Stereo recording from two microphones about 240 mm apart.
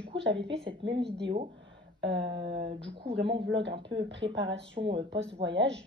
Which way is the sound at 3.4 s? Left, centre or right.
Right.